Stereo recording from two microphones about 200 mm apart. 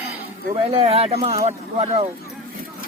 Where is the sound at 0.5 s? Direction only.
30° right (ahead or behind).